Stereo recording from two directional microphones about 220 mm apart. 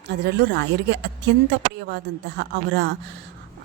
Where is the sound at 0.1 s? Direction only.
50° right (ahead or behind).